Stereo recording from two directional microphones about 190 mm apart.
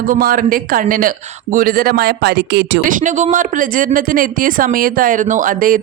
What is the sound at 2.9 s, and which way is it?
Speech, 40° right (ahead or behind).